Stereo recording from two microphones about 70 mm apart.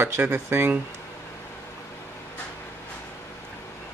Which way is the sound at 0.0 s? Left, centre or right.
Right.